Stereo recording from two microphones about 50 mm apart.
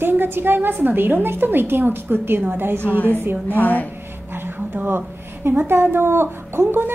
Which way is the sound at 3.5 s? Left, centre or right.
Left.